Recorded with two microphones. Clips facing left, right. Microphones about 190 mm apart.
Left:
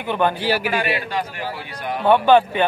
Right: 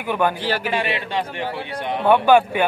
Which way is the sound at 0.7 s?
25° right (ahead or behind).